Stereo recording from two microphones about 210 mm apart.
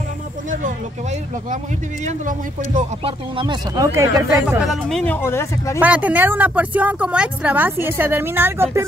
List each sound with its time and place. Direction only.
2.0 s speech: 40° right (ahead or behind)
3.0 s speech: 25° right (ahead or behind)
4.6 s speech: centre (ahead or behind)
5.8 s speech: 5° right (ahead or behind)